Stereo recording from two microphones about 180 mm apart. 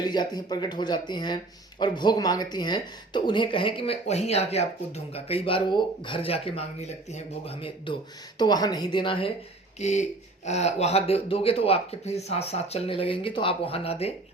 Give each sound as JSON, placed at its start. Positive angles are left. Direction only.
{"t": 0.0, "sound": "speech", "side_deg": 25}
{"t": 9.8, "sound": "speech", "side_deg": 40}